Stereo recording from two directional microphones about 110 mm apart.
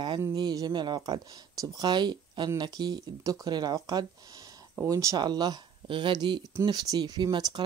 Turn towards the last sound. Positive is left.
turn(degrees=-40)  # may be behind; listen again after turning